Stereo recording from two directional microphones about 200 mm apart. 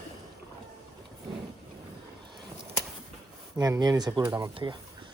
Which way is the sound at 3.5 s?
15° right (ahead or behind).